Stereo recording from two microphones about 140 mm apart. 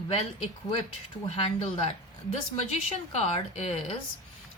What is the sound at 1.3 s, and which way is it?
Speech, 45° left (ahead or behind).